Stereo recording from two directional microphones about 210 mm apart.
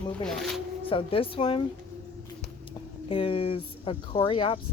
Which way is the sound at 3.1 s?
25° left (ahead or behind).